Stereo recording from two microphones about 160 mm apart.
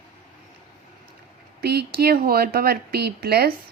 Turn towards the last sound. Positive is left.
turn(degrees=-80)